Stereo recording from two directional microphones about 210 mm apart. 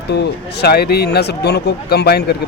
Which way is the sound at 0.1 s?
50° left (ahead or behind).